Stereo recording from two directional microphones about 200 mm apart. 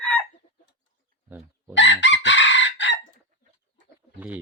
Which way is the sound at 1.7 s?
65° left (ahead or behind).